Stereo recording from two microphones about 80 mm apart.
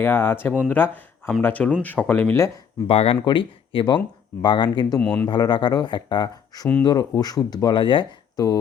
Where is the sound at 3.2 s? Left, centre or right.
Left.